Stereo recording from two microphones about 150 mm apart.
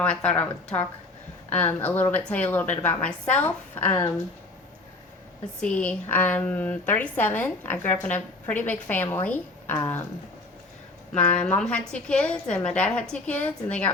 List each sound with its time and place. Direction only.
0.0 s a woman's voice: 5° left (ahead or behind)
3.8 s speech: 30° left (ahead or behind)
5.5 s a woman's voice: 10° left (ahead or behind)
11.1 s a woman's voice: 10° left (ahead or behind)